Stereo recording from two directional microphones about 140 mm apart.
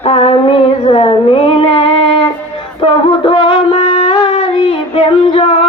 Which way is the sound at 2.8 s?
35° left (ahead or behind).